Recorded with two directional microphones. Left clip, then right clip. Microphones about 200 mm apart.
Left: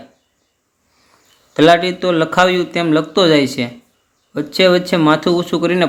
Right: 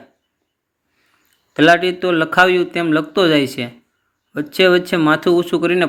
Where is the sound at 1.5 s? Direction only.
10° right (ahead or behind).